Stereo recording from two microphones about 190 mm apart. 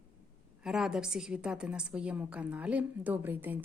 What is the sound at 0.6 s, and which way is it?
A woman's voice, 5° right (ahead or behind).